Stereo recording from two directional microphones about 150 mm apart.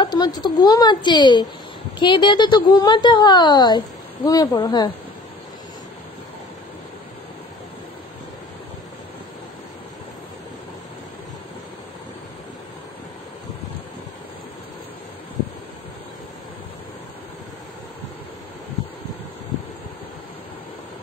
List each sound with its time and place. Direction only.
0.0 s a woman's voice: 25° left (ahead or behind)